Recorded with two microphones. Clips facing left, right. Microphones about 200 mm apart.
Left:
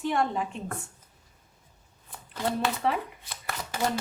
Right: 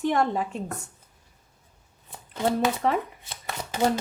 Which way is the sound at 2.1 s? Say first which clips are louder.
Right 5 dB; 25° right (ahead or behind).